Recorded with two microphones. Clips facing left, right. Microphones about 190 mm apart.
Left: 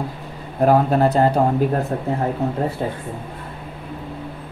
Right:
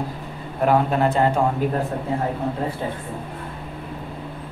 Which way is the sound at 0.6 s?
40° left (ahead or behind).